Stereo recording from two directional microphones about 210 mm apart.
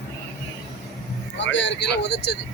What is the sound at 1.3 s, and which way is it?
Speech, 60° left (ahead or behind).